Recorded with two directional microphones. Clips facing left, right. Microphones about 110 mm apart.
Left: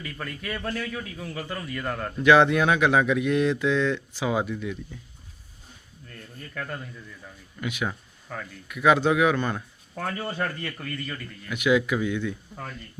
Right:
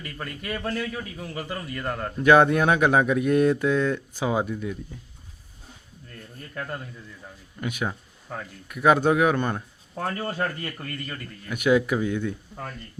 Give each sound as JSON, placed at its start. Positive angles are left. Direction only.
{"t": 0.0, "sound": "a man's voice", "side_deg": -5}
{"t": 2.2, "sound": "speech", "side_deg": -40}
{"t": 4.3, "sound": "speech", "side_deg": -30}
{"t": 6.6, "sound": "a man's voice", "side_deg": -10}
{"t": 7.6, "sound": "speech", "side_deg": -40}
{"t": 7.9, "sound": "speech", "side_deg": -20}
{"t": 8.6, "sound": "speech", "side_deg": -40}
{"t": 9.6, "sound": "a man's voice", "side_deg": -20}
{"t": 11.5, "sound": "speech", "side_deg": -40}